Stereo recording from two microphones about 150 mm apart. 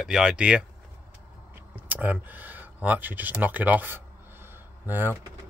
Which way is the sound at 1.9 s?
10° right (ahead or behind).